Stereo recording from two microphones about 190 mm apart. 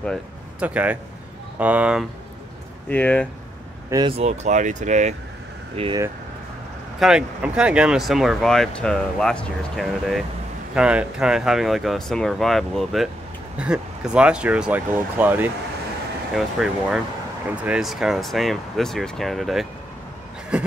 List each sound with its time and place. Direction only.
0.6 s speech: 5° right (ahead or behind)
2.9 s speech: 10° left (ahead or behind)
4.2 s speech: 35° right (ahead or behind)
7.0 s speech: 5° right (ahead or behind)
20.5 s a sound: 5° right (ahead or behind)